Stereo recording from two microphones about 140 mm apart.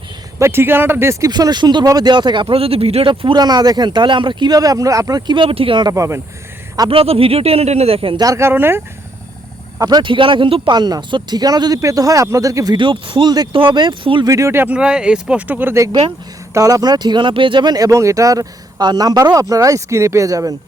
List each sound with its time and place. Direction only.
0.3 s speech: 15° right (ahead or behind)
1.3 s speech: 30° right (ahead or behind)
5.9 s speech: 20° right (ahead or behind)
6.7 s speech: 35° right (ahead or behind)
8.2 s speech: 20° right (ahead or behind)
9.8 s speech: 30° right (ahead or behind)
12.7 s speech: 35° right (ahead or behind)
14.3 s speech: 20° right (ahead or behind)